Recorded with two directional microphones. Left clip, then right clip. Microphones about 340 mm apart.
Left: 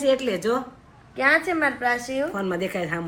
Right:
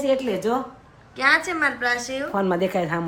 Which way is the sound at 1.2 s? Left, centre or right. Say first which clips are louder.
Right 1 dB; centre.